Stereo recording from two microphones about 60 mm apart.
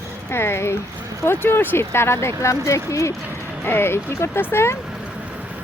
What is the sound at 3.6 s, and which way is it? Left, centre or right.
Speech, left.